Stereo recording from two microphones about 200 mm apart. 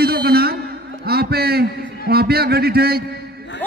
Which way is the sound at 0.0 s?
50° right (ahead or behind).